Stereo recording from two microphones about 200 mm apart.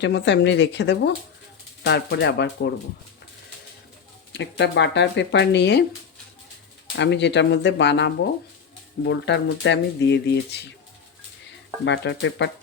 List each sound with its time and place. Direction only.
0.0 s speech: 60° left (ahead or behind)
4.3 s speech: 60° left (ahead or behind)
6.9 s speech: 60° left (ahead or behind)
12.1 s speech: 65° left (ahead or behind)